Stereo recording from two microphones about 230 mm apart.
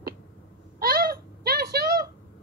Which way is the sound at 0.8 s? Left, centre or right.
Right.